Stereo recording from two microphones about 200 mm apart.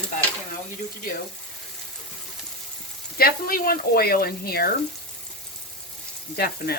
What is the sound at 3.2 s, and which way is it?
Speech, 45° left (ahead or behind).